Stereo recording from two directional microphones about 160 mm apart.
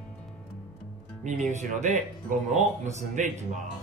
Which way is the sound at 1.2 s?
50° right (ahead or behind).